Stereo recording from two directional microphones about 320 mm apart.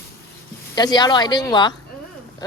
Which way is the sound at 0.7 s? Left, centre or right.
Centre.